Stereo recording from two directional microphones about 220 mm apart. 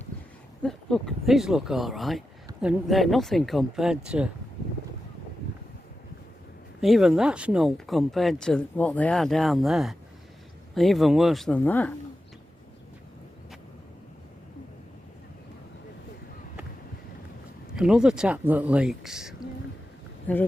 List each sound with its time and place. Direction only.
0.6 s speech: 5° left (ahead or behind)
6.8 s speech: centre (ahead or behind)
17.7 s speech: 5° right (ahead or behind)